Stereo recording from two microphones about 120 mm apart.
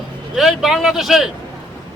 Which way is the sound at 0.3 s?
Centre (ahead or behind).